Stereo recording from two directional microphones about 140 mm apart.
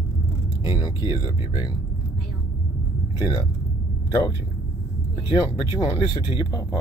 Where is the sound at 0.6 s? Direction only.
30° left (ahead or behind).